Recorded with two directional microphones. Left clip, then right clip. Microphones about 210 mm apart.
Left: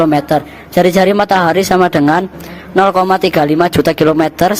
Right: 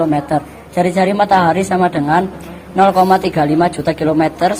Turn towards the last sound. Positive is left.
turn(degrees=50)  # may be behind; listen again after turning